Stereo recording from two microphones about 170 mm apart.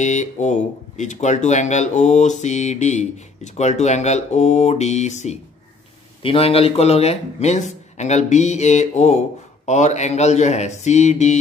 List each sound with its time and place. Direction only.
0.0 s speech: 45° left (ahead or behind)